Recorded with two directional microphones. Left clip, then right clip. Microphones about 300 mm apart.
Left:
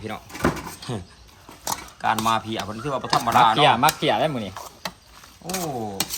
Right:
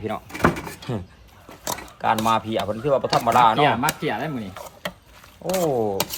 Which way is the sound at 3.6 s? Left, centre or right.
Centre.